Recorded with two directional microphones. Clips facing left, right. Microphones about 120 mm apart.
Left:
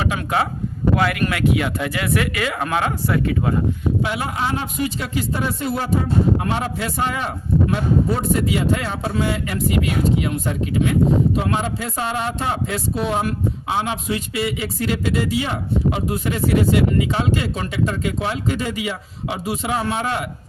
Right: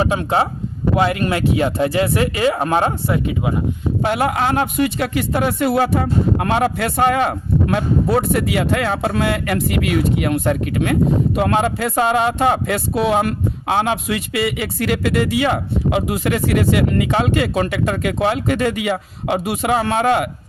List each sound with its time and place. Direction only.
0.0 s speech: 30° right (ahead or behind)
4.0 s speech: 60° right (ahead or behind)